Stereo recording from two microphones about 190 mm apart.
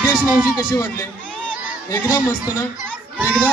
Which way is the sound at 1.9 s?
20° left (ahead or behind).